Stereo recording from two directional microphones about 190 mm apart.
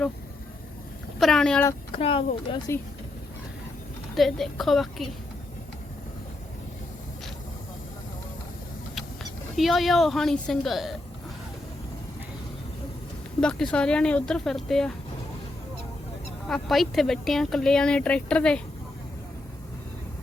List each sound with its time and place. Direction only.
1.2 s speech: 5° left (ahead or behind)
2.0 s speech: 30° left (ahead or behind)
4.1 s speech: centre (ahead or behind)
9.6 s speech: centre (ahead or behind)
13.4 s speech: 5° left (ahead or behind)
16.5 s speech: centre (ahead or behind)